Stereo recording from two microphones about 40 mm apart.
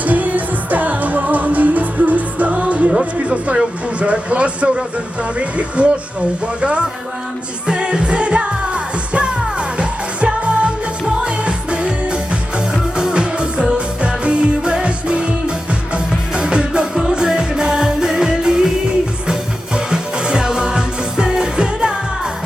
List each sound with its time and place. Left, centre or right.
0.0 s music: right
3.2 s speech: right
7.7 s music: right